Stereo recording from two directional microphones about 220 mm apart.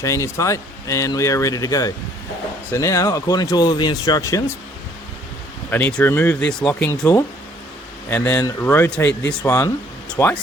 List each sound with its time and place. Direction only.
0.0 s speech: 15° left (ahead or behind)
5.7 s speech: 10° left (ahead or behind)
8.1 s speech: 10° left (ahead or behind)